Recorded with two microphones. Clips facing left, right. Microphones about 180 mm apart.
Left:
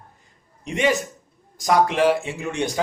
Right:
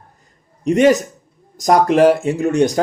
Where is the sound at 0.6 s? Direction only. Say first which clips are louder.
Right 9 dB; 40° right (ahead or behind).